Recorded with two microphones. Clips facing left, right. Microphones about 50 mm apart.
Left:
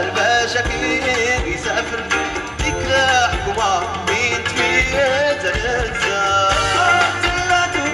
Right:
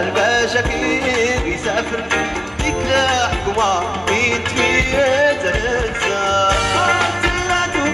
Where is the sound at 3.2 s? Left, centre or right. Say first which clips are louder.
Even; right.